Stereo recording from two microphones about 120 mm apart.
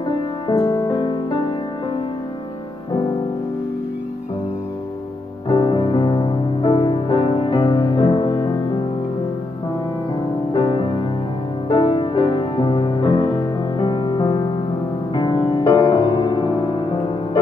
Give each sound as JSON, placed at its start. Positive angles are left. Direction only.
{"t": 0.5, "sound": "music", "side_deg": 35}
{"t": 5.5, "sound": "music", "side_deg": 40}
{"t": 6.9, "sound": "music", "side_deg": 50}
{"t": 10.5, "sound": "music", "side_deg": 45}